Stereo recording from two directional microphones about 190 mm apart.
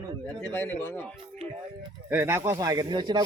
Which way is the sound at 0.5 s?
10° left (ahead or behind).